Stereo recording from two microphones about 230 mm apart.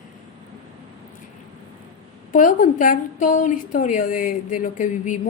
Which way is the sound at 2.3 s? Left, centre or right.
Left.